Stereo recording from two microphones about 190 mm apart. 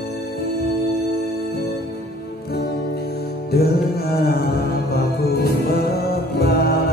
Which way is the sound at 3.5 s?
55° left (ahead or behind).